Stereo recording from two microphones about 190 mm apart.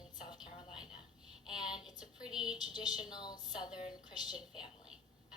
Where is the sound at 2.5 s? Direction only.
20° left (ahead or behind).